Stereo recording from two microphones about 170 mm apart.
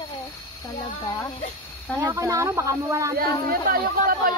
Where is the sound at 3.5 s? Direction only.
60° right (ahead or behind).